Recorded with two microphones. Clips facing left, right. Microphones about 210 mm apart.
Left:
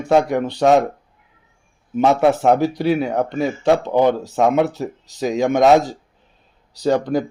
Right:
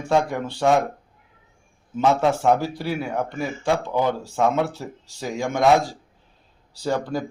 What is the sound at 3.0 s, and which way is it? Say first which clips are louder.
Speech: left 6 dB; 70° left (ahead or behind).